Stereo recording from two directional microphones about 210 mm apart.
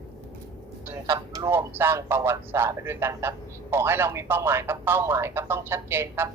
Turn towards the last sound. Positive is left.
turn(degrees=-10)  # may be behind; listen again after turning